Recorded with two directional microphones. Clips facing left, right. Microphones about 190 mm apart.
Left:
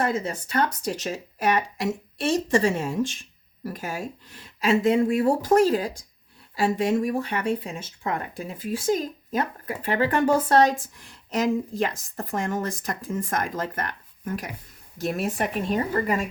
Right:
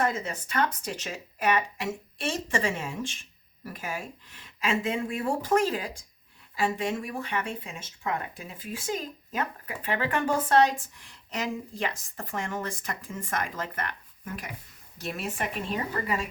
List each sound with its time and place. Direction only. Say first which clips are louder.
0.0 s speech: left 3 dB; 35° left (ahead or behind)